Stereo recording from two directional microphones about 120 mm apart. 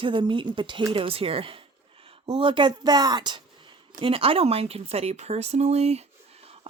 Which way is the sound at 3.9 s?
50° right (ahead or behind).